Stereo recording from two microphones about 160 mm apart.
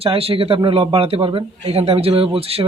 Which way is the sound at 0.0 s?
35° right (ahead or behind).